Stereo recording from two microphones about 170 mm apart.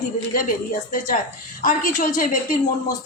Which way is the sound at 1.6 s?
50° left (ahead or behind).